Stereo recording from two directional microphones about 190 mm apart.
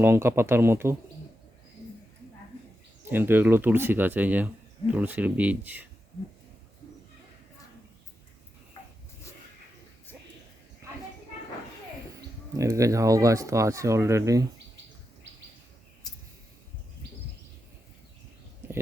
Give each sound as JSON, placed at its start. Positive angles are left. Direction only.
{"t": 0.0, "sound": "speech", "side_deg": -15}
{"t": 3.0, "sound": "speech", "side_deg": -10}
{"t": 10.8, "sound": "a sound", "side_deg": -15}
{"t": 12.5, "sound": "speech", "side_deg": -15}